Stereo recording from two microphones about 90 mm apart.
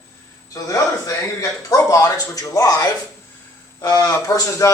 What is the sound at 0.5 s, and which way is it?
A man's voice, 40° left (ahead or behind).